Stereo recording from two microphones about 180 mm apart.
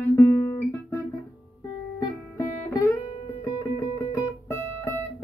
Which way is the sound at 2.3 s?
20° left (ahead or behind).